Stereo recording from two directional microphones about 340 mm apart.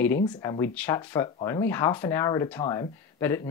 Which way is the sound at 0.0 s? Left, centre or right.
Centre.